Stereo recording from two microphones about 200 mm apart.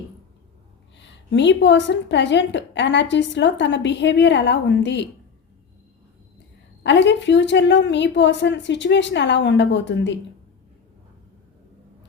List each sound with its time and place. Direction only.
0.9 s a woman's voice: 60° left (ahead or behind)
6.8 s a woman's voice: 60° left (ahead or behind)